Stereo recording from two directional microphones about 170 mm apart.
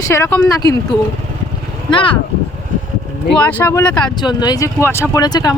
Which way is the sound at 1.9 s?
30° left (ahead or behind).